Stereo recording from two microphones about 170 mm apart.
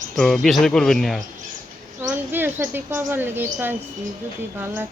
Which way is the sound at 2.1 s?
10° right (ahead or behind).